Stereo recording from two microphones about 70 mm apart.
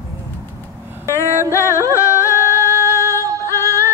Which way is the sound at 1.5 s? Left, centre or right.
Left.